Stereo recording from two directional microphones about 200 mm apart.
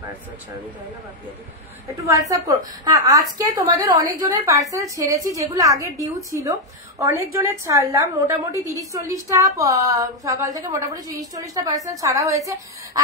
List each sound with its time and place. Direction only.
2.0 s a woman's voice: 15° right (ahead or behind)